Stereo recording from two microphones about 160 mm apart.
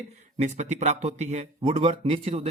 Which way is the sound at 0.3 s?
45° right (ahead or behind).